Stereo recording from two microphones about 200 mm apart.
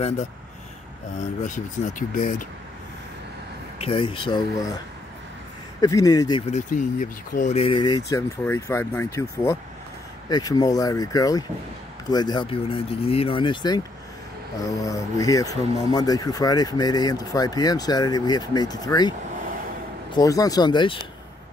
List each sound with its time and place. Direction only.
1.4 s speech: 40° left (ahead or behind)
3.7 s speech: 30° left (ahead or behind)
5.8 s speech: 15° left (ahead or behind)
6.5 s speech: 40° left (ahead or behind); by 21.0 s 25° left (ahead or behind)